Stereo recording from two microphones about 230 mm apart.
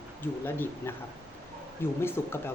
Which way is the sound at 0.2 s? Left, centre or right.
Centre.